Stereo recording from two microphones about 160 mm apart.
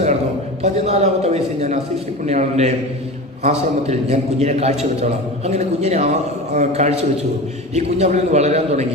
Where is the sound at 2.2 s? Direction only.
45° right (ahead or behind).